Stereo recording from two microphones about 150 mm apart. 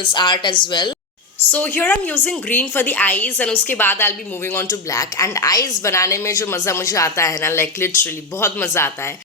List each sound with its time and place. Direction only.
0.0 s a woman's voice: 30° left (ahead or behind)
1.5 s a woman's voice: 10° left (ahead or behind)